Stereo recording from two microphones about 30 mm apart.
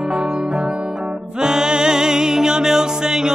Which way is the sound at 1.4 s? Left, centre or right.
Right.